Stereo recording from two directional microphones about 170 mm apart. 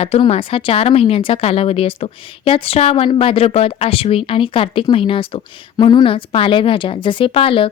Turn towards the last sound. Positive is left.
turn(degrees=30)  # may be behind; listen again after turning